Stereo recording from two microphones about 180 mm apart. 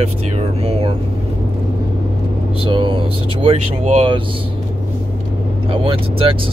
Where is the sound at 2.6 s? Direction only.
30° right (ahead or behind).